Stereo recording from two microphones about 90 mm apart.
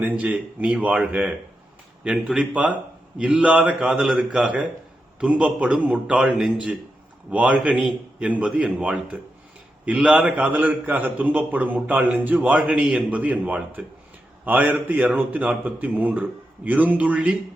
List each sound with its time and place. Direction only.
0.0 s a man's voice: 15° right (ahead or behind)